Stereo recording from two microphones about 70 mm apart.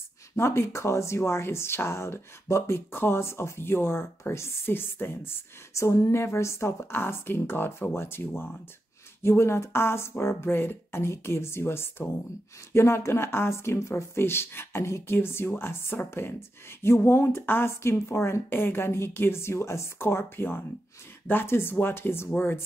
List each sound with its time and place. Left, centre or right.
0.4 s speech: left